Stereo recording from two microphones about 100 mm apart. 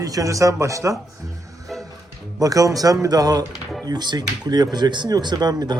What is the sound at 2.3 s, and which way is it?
A man's voice, 35° right (ahead or behind).